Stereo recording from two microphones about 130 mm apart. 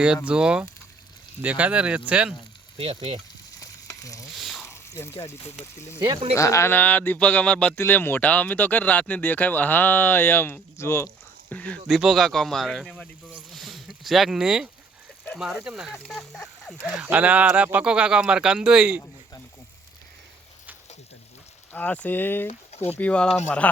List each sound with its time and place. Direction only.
0.3 s speech: 5° right (ahead or behind)
2.7 s frying: 45° right (ahead or behind)
3.6 s frying: 25° left (ahead or behind)
4.4 s water: centre (ahead or behind)
4.6 s water: 20° left (ahead or behind)
6.3 s speech: 25° left (ahead or behind)
11.5 s speech: 10° left (ahead or behind)
11.9 s speech: centre (ahead or behind)
17.0 s speech: 10° right (ahead or behind)
21.7 s speech: 15° left (ahead or behind)
22.4 s speech: 50° left (ahead or behind)
23.0 s speech: 10° left (ahead or behind)